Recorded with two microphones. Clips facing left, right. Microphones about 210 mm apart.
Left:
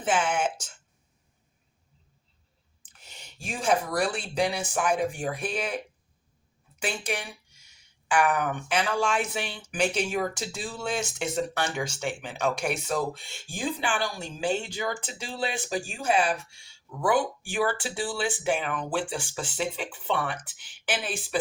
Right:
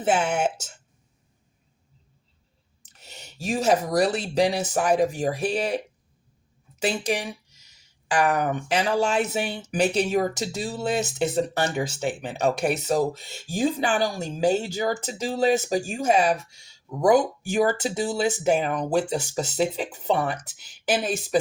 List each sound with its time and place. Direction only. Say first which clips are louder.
0.0 s speech: right 3 dB; 40° right (ahead or behind)
2.9 s clicking: right 5 dB; 40° right (ahead or behind)
3.4 s speech: right 5 dB; 40° right (ahead or behind)
6.8 s speech: right 6 dB; 40° right (ahead or behind)